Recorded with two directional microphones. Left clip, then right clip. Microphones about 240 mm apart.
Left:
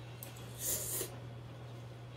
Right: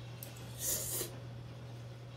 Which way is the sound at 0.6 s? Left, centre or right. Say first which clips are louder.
Right 1 dB; centre.